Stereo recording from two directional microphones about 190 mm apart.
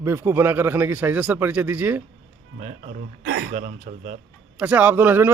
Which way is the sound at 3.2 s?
70° right (ahead or behind).